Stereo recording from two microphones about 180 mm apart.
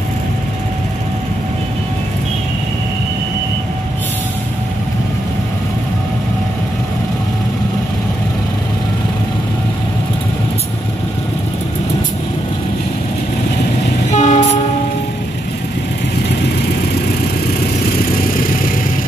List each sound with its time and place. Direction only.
14.1 s train: 40° left (ahead or behind)